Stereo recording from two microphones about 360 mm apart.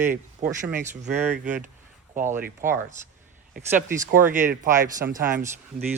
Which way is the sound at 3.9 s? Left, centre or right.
Right.